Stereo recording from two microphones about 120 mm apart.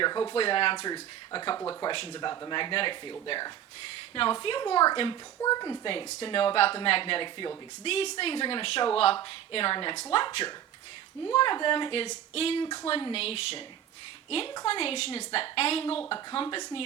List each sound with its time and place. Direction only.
0.0 s speech: 35° left (ahead or behind)
0.3 s speech: 50° left (ahead or behind); by 1.9 s 30° left (ahead or behind)
1.9 s speech: 40° left (ahead or behind)
11.3 s a woman's voice: 45° left (ahead or behind)
16.0 s speech: 45° left (ahead or behind)